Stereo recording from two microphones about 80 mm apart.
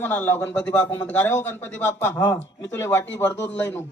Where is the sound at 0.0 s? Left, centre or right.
Left.